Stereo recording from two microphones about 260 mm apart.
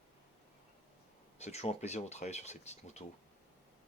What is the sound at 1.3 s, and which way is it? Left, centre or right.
Speech, left.